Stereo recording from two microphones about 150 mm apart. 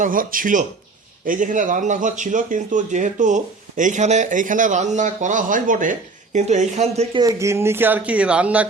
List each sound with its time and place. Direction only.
0.0 s speech: 65° right (ahead or behind); by 7.2 s 45° right (ahead or behind)
7.2 s speech: 20° right (ahead or behind)